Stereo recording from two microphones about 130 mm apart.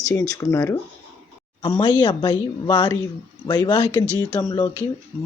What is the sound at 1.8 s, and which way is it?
Speech, 35° left (ahead or behind).